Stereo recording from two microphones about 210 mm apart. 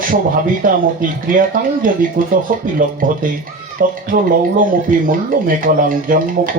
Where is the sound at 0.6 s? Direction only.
40° right (ahead or behind).